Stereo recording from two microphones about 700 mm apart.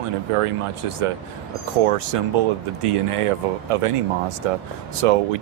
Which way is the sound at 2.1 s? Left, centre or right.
Right.